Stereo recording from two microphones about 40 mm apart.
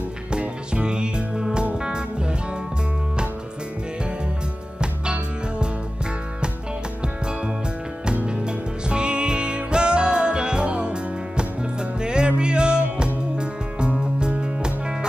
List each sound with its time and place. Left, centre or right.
0.3 s music: right
8.3 s music: right